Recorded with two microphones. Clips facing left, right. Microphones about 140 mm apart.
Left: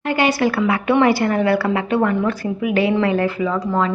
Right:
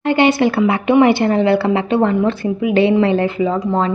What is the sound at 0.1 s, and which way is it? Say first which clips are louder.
A woman's voice: right 4 dB; 25° right (ahead or behind).